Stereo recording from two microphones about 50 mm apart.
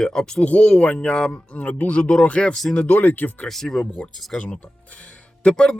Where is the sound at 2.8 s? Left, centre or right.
Left.